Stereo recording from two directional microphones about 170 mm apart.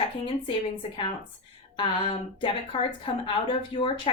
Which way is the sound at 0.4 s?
30° left (ahead or behind).